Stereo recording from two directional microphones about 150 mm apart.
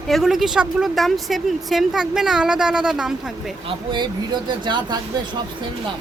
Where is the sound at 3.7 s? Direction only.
30° right (ahead or behind).